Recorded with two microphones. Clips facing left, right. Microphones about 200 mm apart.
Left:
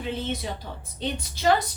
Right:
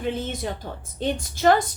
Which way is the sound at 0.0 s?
50° right (ahead or behind).